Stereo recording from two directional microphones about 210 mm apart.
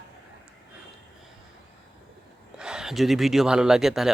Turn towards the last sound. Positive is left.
turn(degrees=0)  # may be behind; listen again after turning